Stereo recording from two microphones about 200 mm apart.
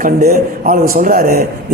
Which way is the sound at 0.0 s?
50° right (ahead or behind).